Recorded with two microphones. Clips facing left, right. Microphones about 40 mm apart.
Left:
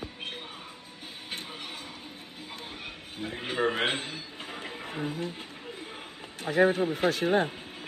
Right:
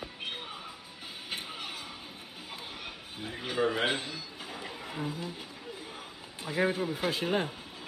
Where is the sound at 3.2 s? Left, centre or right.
Left.